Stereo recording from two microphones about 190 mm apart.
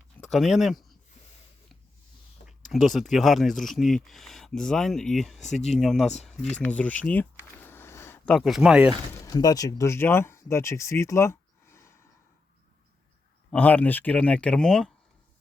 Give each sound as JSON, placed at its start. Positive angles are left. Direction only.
{"t": 0.2, "sound": "speech", "side_deg": 0}
{"t": 2.7, "sound": "speech", "side_deg": 0}
{"t": 5.5, "sound": "speech", "side_deg": 35}
{"t": 5.8, "sound": "speech", "side_deg": 0}
{"t": 9.2, "sound": "speech", "side_deg": 20}
{"t": 13.5, "sound": "speech", "side_deg": 5}